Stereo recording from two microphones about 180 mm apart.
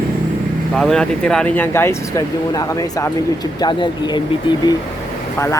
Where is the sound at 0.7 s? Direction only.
5° left (ahead or behind).